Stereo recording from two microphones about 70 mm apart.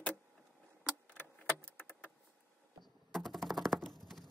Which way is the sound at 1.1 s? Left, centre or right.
Left.